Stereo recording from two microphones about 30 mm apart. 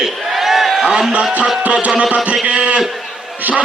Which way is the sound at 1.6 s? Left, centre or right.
Right.